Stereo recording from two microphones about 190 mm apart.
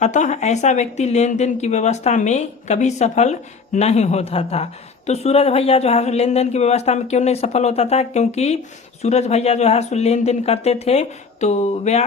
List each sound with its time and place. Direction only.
0.0 s speech: 40° left (ahead or behind)